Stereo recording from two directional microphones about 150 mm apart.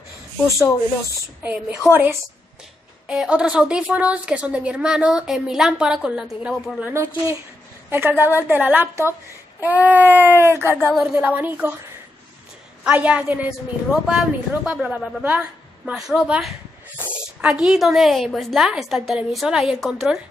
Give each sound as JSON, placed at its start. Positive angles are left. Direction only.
{"t": 0.5, "sound": "speech", "side_deg": 20}
{"t": 1.4, "sound": "a woman's voice", "side_deg": -10}
{"t": 10.9, "sound": "a woman's voice", "side_deg": -5}
{"t": 12.8, "sound": "a woman's voice", "side_deg": -10}